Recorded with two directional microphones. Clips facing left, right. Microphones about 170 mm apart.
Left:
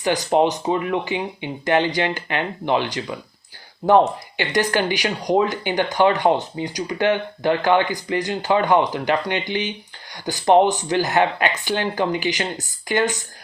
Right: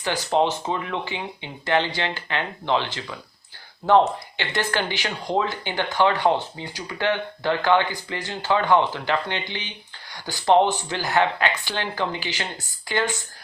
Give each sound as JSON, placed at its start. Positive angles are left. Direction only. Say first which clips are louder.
{"t": 0.2, "sound": "speech", "louder": "left 3 dB", "side_deg": 15}